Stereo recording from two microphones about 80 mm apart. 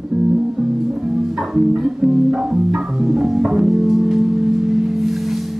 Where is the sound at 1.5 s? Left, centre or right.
Centre.